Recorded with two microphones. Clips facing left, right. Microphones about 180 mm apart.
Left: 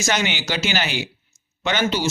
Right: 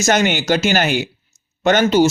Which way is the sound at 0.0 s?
50° right (ahead or behind).